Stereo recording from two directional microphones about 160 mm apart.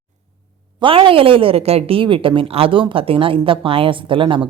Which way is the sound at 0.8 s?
35° right (ahead or behind).